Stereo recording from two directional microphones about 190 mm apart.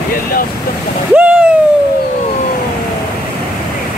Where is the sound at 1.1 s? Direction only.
10° right (ahead or behind).